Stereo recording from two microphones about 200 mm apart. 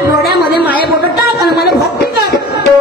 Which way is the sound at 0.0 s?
50° left (ahead or behind).